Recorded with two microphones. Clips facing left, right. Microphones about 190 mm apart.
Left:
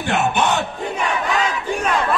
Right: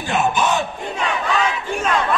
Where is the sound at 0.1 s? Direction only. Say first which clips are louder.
Even; 65° left (ahead or behind).